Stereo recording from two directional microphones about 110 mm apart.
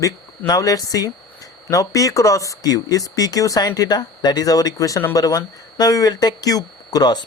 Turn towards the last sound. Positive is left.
turn(degrees=35)  # may be behind; listen again after turning